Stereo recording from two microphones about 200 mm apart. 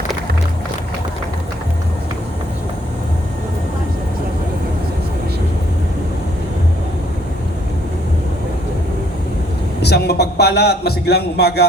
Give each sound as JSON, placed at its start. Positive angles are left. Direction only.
{"t": 9.8, "sound": "a man's voice", "side_deg": 55}